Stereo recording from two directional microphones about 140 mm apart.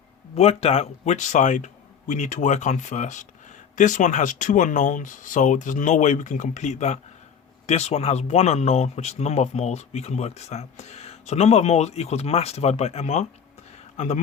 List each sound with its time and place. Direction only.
0.3 s speech: 50° left (ahead or behind)